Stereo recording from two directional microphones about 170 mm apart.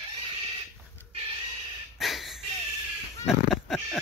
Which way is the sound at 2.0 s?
Centre (ahead or behind).